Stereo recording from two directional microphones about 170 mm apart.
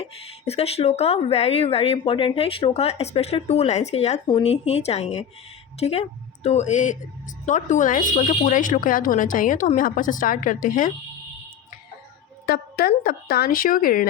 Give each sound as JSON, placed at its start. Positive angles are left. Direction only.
{"t": 0.0, "sound": "speech", "side_deg": 35}
{"t": 4.3, "sound": "speech", "side_deg": 30}
{"t": 12.5, "sound": "speech", "side_deg": 65}